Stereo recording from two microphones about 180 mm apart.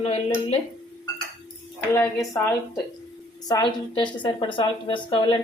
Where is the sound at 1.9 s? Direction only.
15° left (ahead or behind).